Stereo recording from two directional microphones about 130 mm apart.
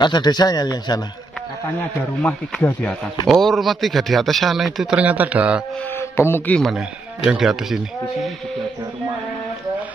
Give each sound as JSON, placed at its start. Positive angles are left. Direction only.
{"t": 0.0, "sound": "a man's voice", "side_deg": 35}
{"t": 1.8, "sound": "speech", "side_deg": 15}
{"t": 5.9, "sound": "speech", "side_deg": 20}
{"t": 7.2, "sound": "speech", "side_deg": -5}